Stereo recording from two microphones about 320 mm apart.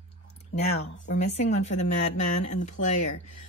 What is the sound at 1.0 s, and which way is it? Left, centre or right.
Speech, left.